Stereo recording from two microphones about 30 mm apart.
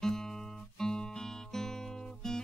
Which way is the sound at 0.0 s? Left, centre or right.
Centre.